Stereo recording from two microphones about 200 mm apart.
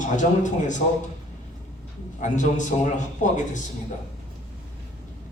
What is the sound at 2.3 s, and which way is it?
A man's voice, 40° left (ahead or behind).